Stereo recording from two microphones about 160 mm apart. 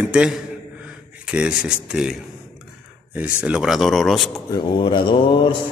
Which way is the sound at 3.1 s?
10° right (ahead or behind).